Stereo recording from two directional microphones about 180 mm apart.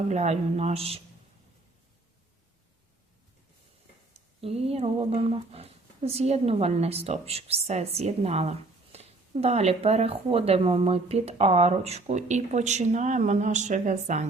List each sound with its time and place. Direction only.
0.1 s speech: 40° right (ahead or behind)
4.4 s speech: 35° right (ahead or behind)